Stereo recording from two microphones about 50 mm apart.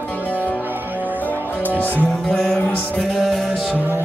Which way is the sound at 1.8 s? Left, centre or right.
Left.